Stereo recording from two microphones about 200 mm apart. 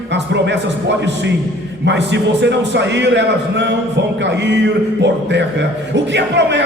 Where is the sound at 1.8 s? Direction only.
60° right (ahead or behind).